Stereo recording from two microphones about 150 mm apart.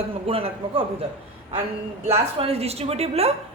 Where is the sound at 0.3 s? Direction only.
40° right (ahead or behind).